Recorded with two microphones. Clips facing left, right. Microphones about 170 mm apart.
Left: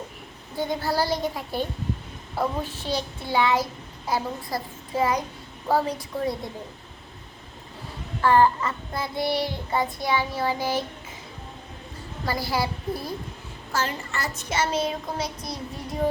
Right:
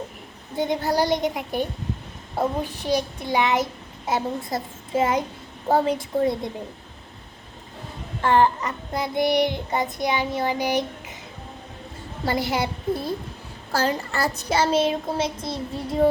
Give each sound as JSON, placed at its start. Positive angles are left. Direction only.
{"t": 0.5, "sound": "a child's voice", "side_deg": -20}
{"t": 8.2, "sound": "a child's voice", "side_deg": -20}
{"t": 12.2, "sound": "a child's voice", "side_deg": -25}
{"t": 13.7, "sound": "a child's voice", "side_deg": -35}